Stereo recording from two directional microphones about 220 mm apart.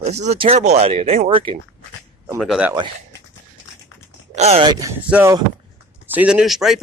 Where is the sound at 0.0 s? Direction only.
30° right (ahead or behind).